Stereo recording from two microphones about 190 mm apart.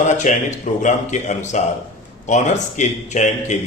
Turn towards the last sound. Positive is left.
turn(degrees=40)  # may be behind; listen again after turning